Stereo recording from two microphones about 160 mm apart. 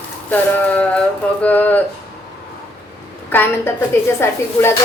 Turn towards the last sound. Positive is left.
turn(degrees=15)  # may be behind; listen again after turning